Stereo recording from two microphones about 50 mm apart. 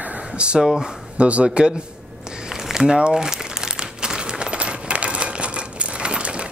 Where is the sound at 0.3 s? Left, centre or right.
Centre.